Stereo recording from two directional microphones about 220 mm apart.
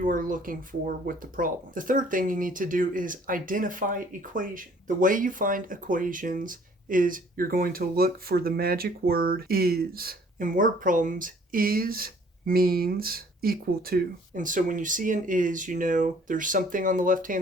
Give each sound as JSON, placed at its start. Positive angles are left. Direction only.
{"t": 0.0, "sound": "speech", "side_deg": -40}